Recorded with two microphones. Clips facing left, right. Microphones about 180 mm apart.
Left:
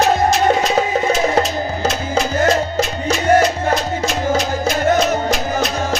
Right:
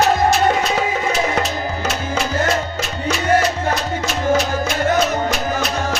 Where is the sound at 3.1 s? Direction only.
45° left (ahead or behind).